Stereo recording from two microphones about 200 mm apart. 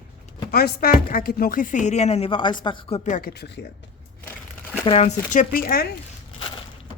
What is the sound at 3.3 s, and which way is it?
Speech, 55° left (ahead or behind).